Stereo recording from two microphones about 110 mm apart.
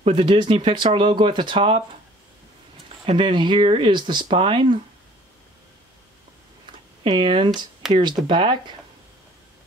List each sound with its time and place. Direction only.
0.0 s speech: 50° right (ahead or behind)
3.1 s speech: 45° right (ahead or behind)
7.0 s speech: 50° right (ahead or behind)